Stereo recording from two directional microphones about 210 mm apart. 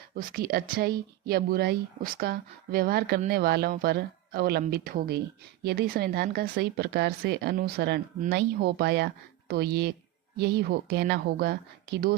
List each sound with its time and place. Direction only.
0.2 s speech: 45° right (ahead or behind)